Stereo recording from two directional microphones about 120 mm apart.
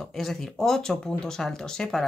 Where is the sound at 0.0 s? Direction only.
Centre (ahead or behind).